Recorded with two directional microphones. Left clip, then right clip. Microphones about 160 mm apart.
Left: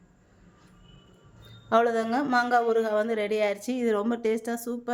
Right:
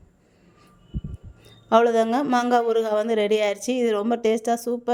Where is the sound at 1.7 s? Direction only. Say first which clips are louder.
Right 5 dB; 35° right (ahead or behind).